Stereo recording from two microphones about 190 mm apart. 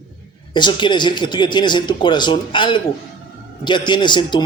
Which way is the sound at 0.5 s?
25° left (ahead or behind).